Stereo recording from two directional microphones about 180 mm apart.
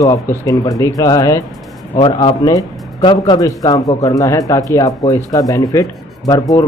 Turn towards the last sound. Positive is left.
turn(degrees=20)  # may be behind; listen again after turning